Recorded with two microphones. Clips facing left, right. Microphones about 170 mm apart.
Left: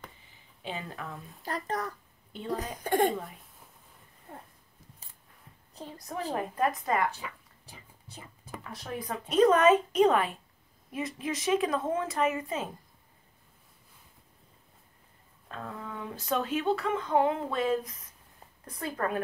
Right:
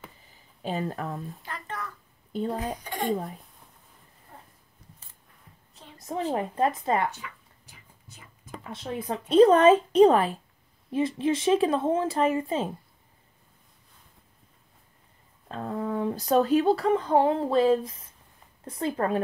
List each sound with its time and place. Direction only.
0.6 s speech: 40° right (ahead or behind)
1.4 s a child's voice: 40° left (ahead or behind)
2.3 s speech: 40° right (ahead or behind)
2.8 s speech: 55° left (ahead or behind)
3.1 s speech: 40° right (ahead or behind)
4.8 s scissors: 5° left (ahead or behind)
6.3 s speech: 25° right (ahead or behind)
7.2 s dog: 30° left (ahead or behind)
8.6 s speech: 25° right (ahead or behind)
15.4 s speech: 35° right (ahead or behind)